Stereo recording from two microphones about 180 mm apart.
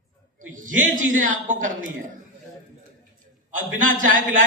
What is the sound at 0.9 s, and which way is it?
Speech, 45° right (ahead or behind).